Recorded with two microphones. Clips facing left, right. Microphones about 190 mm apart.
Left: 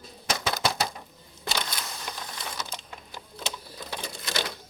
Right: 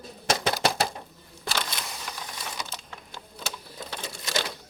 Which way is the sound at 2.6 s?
15° left (ahead or behind).